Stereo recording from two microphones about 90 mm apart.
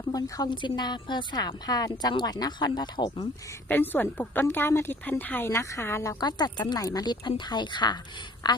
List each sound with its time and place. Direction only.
0.1 s a woman's voice: 45° left (ahead or behind)
3.7 s a woman's voice: 20° left (ahead or behind)
5.5 s a woman's voice: 35° left (ahead or behind)
6.1 s a woman's voice: 50° left (ahead or behind)